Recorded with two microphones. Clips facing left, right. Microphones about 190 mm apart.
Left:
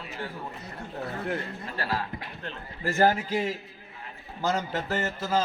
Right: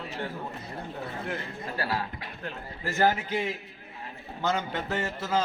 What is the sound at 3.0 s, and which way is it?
Speech, 40° left (ahead or behind).